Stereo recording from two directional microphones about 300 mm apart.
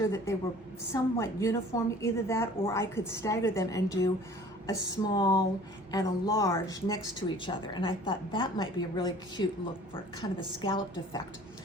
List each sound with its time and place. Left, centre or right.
0.0 s a woman's voice: centre